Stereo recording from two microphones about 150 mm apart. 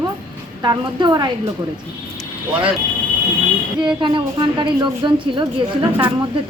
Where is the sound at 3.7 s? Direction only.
30° right (ahead or behind).